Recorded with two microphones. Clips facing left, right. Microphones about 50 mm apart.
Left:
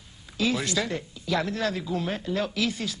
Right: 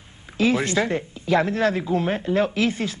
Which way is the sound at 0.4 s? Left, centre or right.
Right.